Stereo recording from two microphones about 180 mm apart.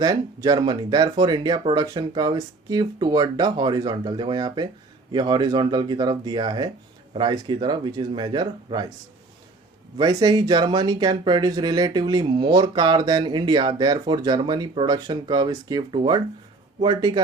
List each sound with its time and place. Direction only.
0.0 s speech: 20° right (ahead or behind)
10.0 s speech: 20° right (ahead or behind)